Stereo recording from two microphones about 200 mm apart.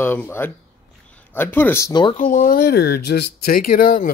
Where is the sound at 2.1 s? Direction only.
40° left (ahead or behind).